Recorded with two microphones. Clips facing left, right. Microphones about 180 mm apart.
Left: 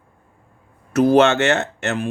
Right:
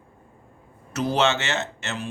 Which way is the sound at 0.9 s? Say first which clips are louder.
Left 9 dB; 55° left (ahead or behind).